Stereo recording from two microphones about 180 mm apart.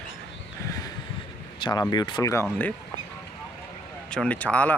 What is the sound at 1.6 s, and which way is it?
Speech, 25° left (ahead or behind).